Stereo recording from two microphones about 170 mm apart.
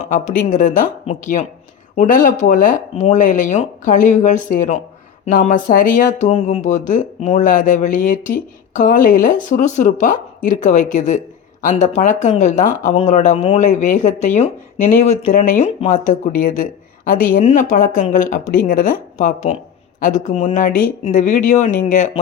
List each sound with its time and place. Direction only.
0.0 s speech: 45° left (ahead or behind)